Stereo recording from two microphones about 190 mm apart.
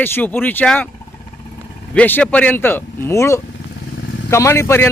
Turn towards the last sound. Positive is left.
turn(degrees=15)  # may be behind; listen again after turning